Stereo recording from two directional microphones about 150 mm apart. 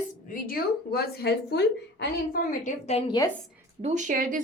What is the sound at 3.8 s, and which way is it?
Speech, 50° right (ahead or behind).